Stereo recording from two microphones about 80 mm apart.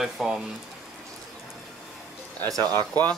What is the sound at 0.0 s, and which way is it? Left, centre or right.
Speech, centre.